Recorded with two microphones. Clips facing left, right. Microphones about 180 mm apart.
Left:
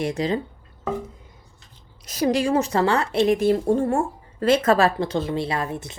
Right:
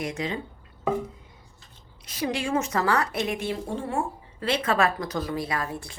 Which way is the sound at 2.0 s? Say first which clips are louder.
Left 7 dB; 40° left (ahead or behind).